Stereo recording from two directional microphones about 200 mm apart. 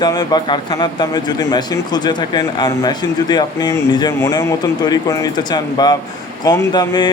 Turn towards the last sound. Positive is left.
turn(degrees=20)  # may be behind; listen again after turning